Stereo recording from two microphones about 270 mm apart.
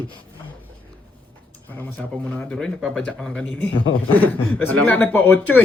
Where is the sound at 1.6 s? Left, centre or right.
Centre.